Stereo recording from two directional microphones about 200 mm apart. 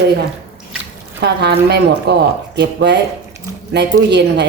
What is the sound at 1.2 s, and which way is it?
A woman's voice, 55° right (ahead or behind).